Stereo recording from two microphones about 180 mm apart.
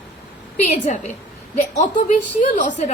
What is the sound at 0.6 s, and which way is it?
A woman's voice, 40° left (ahead or behind).